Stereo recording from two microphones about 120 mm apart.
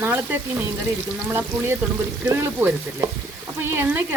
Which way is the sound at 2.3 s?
20° right (ahead or behind).